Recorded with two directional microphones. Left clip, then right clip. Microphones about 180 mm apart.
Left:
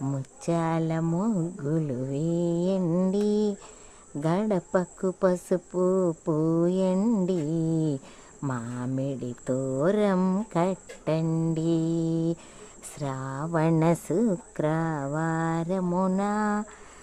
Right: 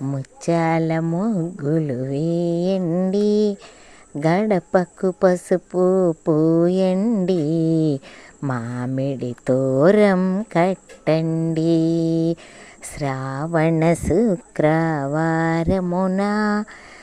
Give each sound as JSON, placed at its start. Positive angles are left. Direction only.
{"t": 0.1, "sound": "speech", "side_deg": -20}
{"t": 2.8, "sound": "mantra", "side_deg": -5}
{"t": 3.1, "sound": "speech", "side_deg": -20}
{"t": 7.0, "sound": "music", "side_deg": -10}
{"t": 7.3, "sound": "speech", "side_deg": -25}
{"t": 10.2, "sound": "music", "side_deg": -10}
{"t": 10.5, "sound": "speech", "side_deg": -20}
{"t": 11.3, "sound": "music", "side_deg": -5}
{"t": 11.5, "sound": "speech", "side_deg": -20}